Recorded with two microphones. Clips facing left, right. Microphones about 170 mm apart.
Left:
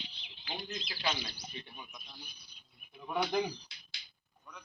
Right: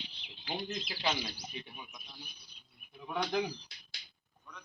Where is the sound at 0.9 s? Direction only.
20° right (ahead or behind).